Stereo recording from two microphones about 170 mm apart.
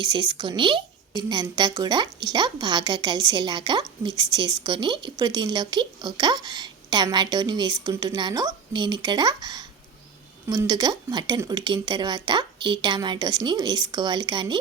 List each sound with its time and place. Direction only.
0.0 s speech: 25° right (ahead or behind)